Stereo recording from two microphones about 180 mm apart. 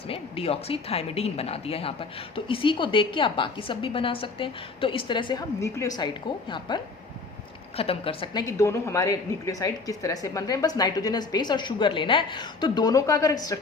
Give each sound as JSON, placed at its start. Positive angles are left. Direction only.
{"t": 0.1, "sound": "speech", "side_deg": 30}